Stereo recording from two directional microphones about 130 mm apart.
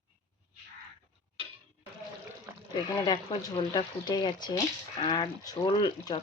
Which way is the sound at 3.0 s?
30° left (ahead or behind).